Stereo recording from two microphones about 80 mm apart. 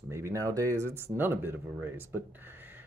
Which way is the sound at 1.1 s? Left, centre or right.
Right.